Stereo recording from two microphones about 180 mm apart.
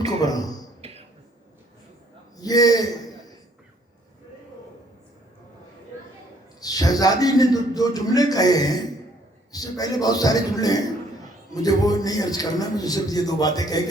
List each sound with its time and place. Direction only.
0.0 s a man's voice: 20° left (ahead or behind)
0.8 s a sound: 35° right (ahead or behind)
2.4 s a man's voice: 20° left (ahead or behind)
6.6 s a man's voice: 20° left (ahead or behind)